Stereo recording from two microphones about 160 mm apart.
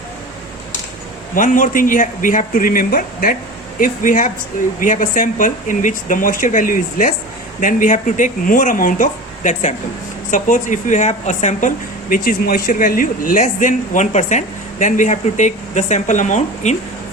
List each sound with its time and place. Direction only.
1.4 s a woman's voice: 55° left (ahead or behind)